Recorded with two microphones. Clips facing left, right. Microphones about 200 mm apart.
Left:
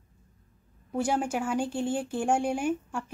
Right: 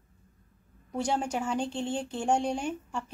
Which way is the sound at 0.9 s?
5° left (ahead or behind).